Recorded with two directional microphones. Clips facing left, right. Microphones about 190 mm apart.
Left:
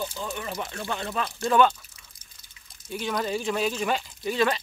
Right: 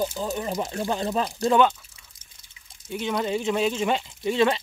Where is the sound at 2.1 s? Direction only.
25° right (ahead or behind).